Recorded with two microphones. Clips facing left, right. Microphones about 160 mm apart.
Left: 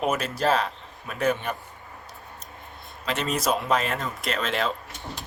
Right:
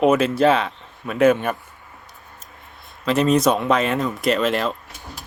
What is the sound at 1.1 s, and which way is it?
Speech, 90° right.